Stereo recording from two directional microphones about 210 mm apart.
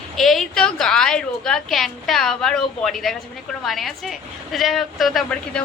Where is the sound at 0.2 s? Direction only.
Centre (ahead or behind).